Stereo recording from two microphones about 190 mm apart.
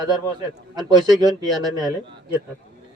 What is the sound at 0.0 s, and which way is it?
A man's voice, 20° right (ahead or behind).